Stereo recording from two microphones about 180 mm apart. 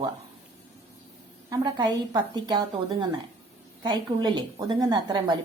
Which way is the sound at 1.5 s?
25° right (ahead or behind).